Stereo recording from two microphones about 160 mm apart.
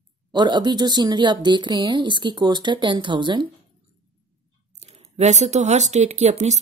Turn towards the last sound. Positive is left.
turn(degrees=-45)  # may be behind; listen again after turning